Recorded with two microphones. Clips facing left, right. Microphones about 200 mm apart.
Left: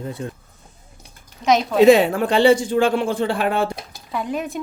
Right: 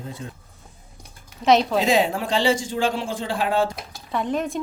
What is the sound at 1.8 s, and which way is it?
Speech, 60° left (ahead or behind).